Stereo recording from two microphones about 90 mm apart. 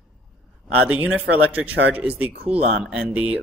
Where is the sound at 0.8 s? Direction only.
15° right (ahead or behind).